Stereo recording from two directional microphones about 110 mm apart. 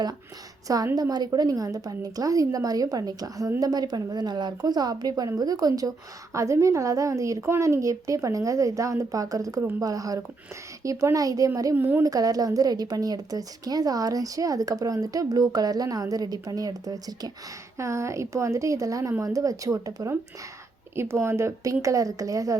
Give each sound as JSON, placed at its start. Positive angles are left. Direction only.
{"t": 0.9, "sound": "a woman's voice", "side_deg": -35}
{"t": 11.8, "sound": "a woman's voice", "side_deg": -15}
{"t": 12.0, "sound": "a woman's voice", "side_deg": -35}
{"t": 17.7, "sound": "a woman's voice", "side_deg": -25}